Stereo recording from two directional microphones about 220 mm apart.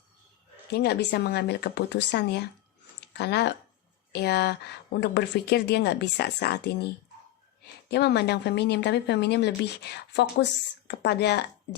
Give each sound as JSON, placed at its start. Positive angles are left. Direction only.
{"t": 0.7, "sound": "a woman's voice", "side_deg": 45}